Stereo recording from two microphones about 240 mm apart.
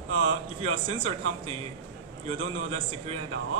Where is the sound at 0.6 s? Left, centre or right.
Right.